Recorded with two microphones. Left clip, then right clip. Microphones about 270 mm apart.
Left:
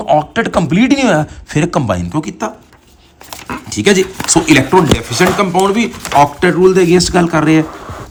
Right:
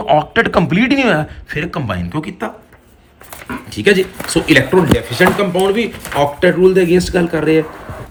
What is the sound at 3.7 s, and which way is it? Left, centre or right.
Speech, left.